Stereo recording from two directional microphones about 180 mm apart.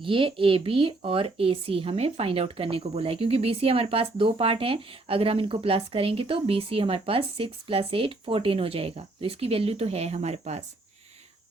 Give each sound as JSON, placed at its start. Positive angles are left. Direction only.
{"t": 0.0, "sound": "speech", "side_deg": -30}